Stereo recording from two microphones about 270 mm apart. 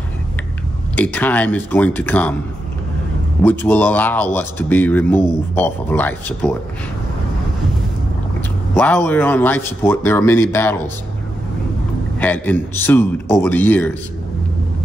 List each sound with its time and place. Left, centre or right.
0.9 s speech: centre
3.4 s speech: centre
8.7 s speech: centre
12.2 s speech: centre